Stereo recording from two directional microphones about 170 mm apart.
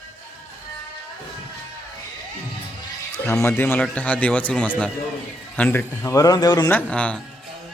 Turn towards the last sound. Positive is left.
turn(degrees=5)  # may be behind; listen again after turning